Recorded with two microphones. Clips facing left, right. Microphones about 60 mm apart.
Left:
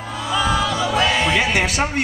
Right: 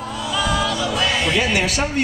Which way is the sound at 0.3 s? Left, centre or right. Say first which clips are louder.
Left 2 dB; left.